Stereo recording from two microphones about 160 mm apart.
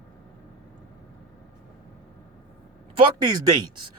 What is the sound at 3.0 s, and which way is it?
Speech, 25° right (ahead or behind).